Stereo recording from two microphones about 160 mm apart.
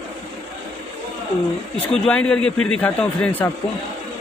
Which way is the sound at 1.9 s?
5° left (ahead or behind).